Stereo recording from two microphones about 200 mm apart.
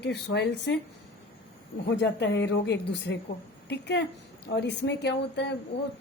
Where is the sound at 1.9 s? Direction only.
60° left (ahead or behind).